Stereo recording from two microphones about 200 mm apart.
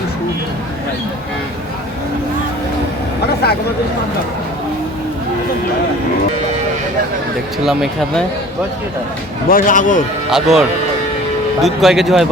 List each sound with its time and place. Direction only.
3.4 s speech: 55° left (ahead or behind)
7.6 s speech: centre (ahead or behind)
9.5 s speech: 45° left (ahead or behind)
10.3 s speech: centre (ahead or behind)